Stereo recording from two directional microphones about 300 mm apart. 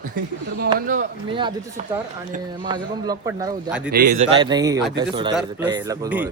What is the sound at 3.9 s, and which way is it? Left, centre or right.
Speech, right.